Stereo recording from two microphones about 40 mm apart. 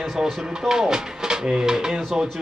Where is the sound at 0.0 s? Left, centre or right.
Centre.